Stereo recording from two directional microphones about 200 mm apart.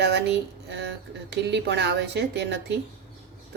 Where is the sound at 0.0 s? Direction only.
55° right (ahead or behind).